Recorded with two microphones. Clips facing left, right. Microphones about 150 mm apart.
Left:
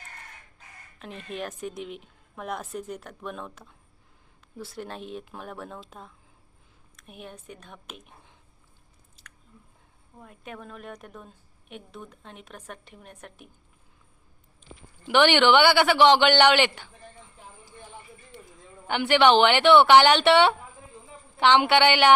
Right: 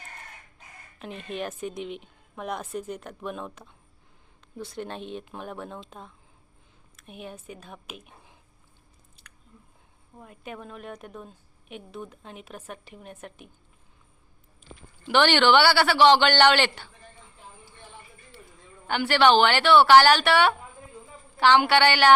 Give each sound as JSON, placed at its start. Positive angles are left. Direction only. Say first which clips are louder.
{"t": 0.9, "sound": "a woman's voice", "louder": "right 2 dB", "side_deg": 0}
{"t": 10.2, "sound": "a woman's voice", "louder": "right 2 dB", "side_deg": 0}
{"t": 15.0, "sound": "speech", "louder": "left 1 dB", "side_deg": 15}
{"t": 18.3, "sound": "a sound", "louder": "left 3 dB", "side_deg": 20}
{"t": 18.9, "sound": "a woman's voice", "louder": "left 1 dB", "side_deg": 20}